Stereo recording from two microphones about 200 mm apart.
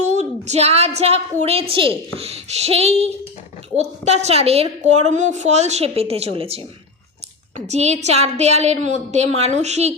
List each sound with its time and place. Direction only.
0.2 s a woman's voice: 35° right (ahead or behind)